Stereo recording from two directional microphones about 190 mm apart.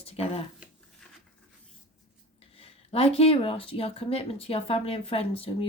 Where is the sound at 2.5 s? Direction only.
30° left (ahead or behind).